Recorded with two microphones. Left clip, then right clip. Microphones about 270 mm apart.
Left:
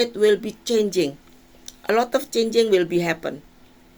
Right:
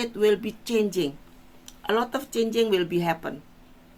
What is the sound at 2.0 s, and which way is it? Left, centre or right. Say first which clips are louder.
Speech: left 6 dB; centre.